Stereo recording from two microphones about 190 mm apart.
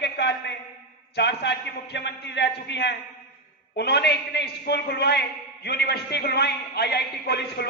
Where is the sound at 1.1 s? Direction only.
65° left (ahead or behind).